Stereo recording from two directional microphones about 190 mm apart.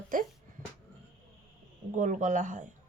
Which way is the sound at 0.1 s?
45° right (ahead or behind).